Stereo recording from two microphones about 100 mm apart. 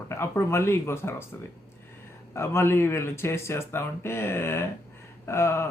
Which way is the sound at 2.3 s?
25° left (ahead or behind).